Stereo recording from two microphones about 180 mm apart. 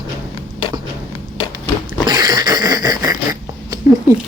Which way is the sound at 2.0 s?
20° right (ahead or behind).